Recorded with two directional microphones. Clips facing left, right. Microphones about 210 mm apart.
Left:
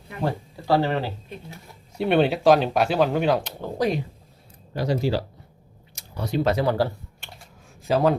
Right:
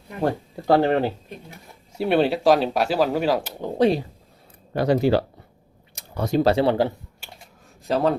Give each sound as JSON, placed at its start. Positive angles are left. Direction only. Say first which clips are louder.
{"t": 0.2, "sound": "speech", "louder": "right 3 dB", "side_deg": -50}
{"t": 2.0, "sound": "speech", "louder": "even", "side_deg": 0}
{"t": 3.8, "sound": "speech", "louder": "right 5 dB", "side_deg": -30}
{"t": 4.7, "sound": "speech", "louder": "right 5 dB", "side_deg": -60}
{"t": 5.9, "sound": "a sound", "louder": "right 5 dB", "side_deg": -55}
{"t": 6.4, "sound": "speech", "louder": "right 3 dB", "side_deg": -30}
{"t": 7.2, "sound": "a sound", "louder": "right 1 dB", "side_deg": -5}
{"t": 7.9, "sound": "speech", "louder": "left 1 dB", "side_deg": 0}